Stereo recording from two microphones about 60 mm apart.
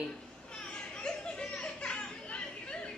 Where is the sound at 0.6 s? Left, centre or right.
Centre.